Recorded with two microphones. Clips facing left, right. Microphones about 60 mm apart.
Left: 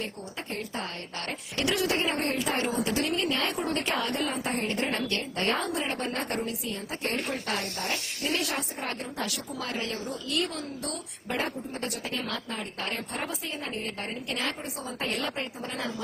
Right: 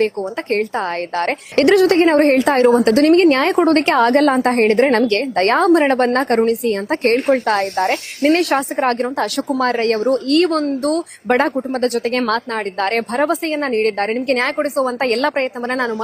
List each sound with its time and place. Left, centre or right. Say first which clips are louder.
1.2 s a woman's voice: right 16 dB; right